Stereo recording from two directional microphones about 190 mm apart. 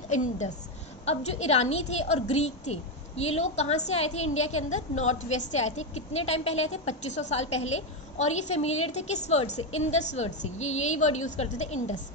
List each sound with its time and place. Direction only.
0.1 s a woman's voice: 40° left (ahead or behind)